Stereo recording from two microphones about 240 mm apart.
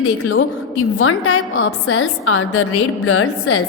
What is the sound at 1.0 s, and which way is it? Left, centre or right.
A woman's voice, left.